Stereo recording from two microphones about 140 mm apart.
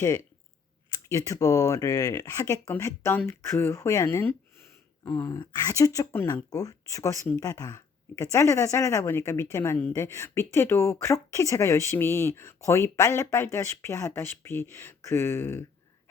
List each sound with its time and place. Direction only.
0.0 s speech: 20° left (ahead or behind)
5.0 s a sound: 15° left (ahead or behind)
5.4 s speech: 25° left (ahead or behind)